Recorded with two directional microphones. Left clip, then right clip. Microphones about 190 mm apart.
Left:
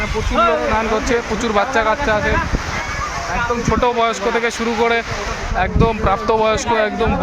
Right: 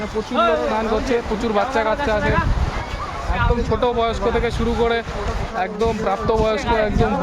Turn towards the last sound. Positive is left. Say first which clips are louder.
# left 3 dB
turn(degrees=15)  # may be behind; listen again after turning